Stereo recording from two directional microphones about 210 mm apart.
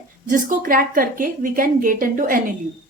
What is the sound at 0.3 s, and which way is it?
A woman's voice, 40° right (ahead or behind).